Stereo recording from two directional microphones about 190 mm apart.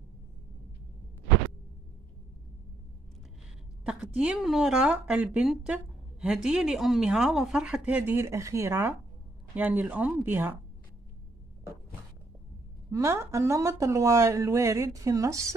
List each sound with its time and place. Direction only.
3.8 s speech: 5° right (ahead or behind)
12.9 s speech: 15° right (ahead or behind)